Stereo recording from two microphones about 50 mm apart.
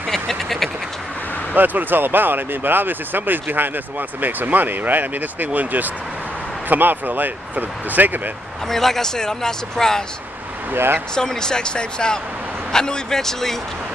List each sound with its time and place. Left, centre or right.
0.1 s duck: centre
1.5 s speech: right
8.6 s speech: centre
10.7 s speech: right
11.1 s speech: centre